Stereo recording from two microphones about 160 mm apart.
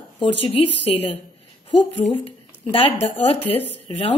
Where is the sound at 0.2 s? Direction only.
35° left (ahead or behind).